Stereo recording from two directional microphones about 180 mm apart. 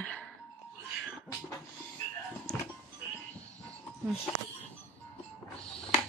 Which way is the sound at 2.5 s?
5° left (ahead or behind).